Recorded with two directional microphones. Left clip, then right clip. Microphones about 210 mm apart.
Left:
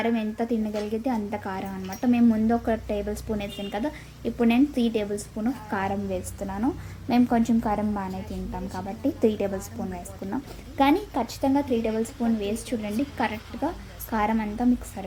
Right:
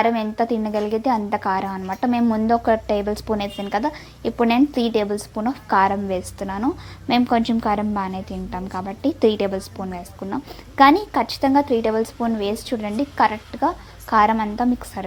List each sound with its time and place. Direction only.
0.0 s a woman's voice: 15° right (ahead or behind)